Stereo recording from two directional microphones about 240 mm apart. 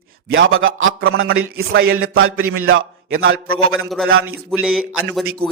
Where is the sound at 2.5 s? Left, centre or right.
Right.